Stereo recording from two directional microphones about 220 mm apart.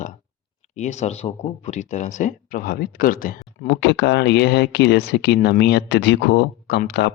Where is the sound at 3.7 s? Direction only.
55° left (ahead or behind).